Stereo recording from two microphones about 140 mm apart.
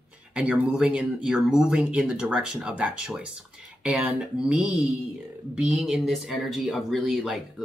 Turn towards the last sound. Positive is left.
turn(degrees=0)  # may be behind; listen again after turning